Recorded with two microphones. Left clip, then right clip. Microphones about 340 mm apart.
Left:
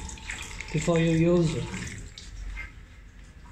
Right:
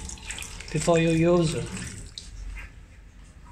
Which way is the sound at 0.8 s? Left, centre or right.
Right.